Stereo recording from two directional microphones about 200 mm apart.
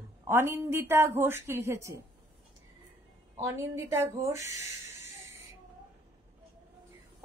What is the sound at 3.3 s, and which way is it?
Speech, 15° right (ahead or behind).